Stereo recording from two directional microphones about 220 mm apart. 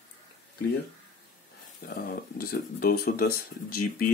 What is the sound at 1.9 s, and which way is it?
Speech, 45° left (ahead or behind).